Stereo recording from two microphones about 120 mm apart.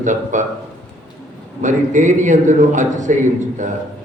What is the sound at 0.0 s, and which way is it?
Speech, 90° right.